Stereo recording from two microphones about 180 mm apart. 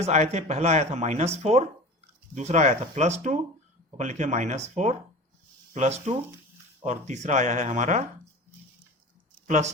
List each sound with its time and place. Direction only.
0.0 s speech: 35° right (ahead or behind)
9.5 s speech: 40° right (ahead or behind)